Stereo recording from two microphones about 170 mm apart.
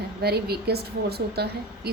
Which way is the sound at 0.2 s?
70° right (ahead or behind).